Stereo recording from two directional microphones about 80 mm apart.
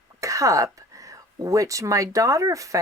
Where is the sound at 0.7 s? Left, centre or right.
Right.